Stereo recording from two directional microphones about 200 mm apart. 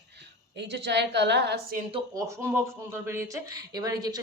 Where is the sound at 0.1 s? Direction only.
60° right (ahead or behind).